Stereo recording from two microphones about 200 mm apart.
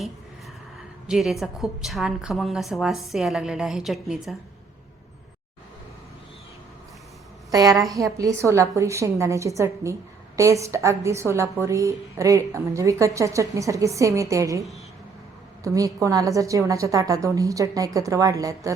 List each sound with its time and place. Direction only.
1.0 s a woman's voice: centre (ahead or behind)
7.5 s a woman's voice: 20° right (ahead or behind)
15.6 s a woman's voice: 15° right (ahead or behind)